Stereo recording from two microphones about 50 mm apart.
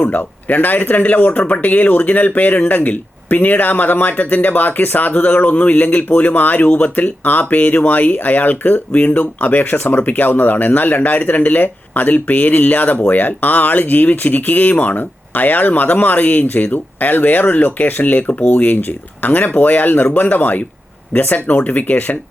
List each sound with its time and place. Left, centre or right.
0.0 s speech: left